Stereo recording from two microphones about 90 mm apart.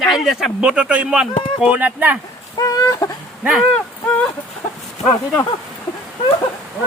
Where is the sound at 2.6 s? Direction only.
40° left (ahead or behind).